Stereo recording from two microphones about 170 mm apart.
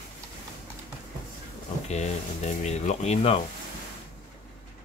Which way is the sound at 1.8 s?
40° left (ahead or behind).